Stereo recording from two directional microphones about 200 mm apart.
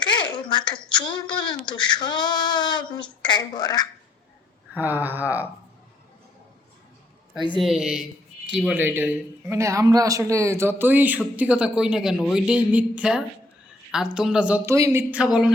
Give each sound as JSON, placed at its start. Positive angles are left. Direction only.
{"t": 0.0, "sound": "speech", "side_deg": 25}
{"t": 4.7, "sound": "speech", "side_deg": -10}
{"t": 7.6, "sound": "a man's voice", "side_deg": 0}